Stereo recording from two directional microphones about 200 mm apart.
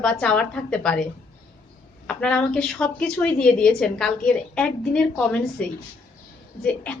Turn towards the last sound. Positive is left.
turn(degrees=5)  # may be behind; listen again after turning